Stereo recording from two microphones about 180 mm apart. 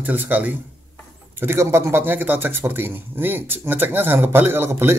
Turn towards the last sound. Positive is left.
turn(degrees=-15)  # may be behind; listen again after turning